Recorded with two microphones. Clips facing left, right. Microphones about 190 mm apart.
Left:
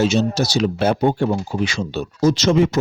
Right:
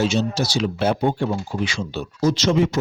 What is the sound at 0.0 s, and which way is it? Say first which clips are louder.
Speech: left 3 dB; 45° left (ahead or behind).